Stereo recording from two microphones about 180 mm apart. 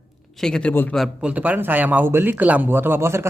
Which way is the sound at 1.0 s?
5° right (ahead or behind).